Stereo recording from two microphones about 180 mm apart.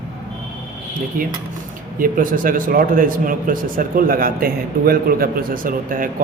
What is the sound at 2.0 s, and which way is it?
A man's voice, 50° right (ahead or behind).